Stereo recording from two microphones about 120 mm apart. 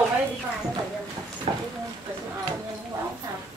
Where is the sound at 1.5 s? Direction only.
55° right (ahead or behind).